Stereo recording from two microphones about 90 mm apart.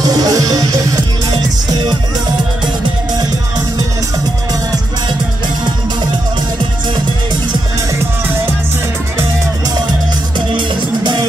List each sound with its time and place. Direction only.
0.0 s music: 45° right (ahead or behind)